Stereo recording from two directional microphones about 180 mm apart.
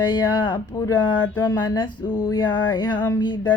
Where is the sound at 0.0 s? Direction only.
25° left (ahead or behind).